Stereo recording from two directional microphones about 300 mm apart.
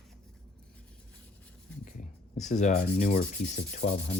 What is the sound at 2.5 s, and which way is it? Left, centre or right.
Rub, left.